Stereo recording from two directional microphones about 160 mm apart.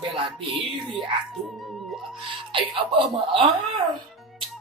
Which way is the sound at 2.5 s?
30° right (ahead or behind).